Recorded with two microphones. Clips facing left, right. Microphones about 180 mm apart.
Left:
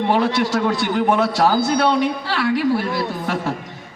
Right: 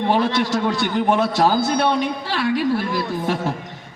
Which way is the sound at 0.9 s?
25° right (ahead or behind).